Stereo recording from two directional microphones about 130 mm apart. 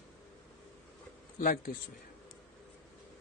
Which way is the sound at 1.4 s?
90° left.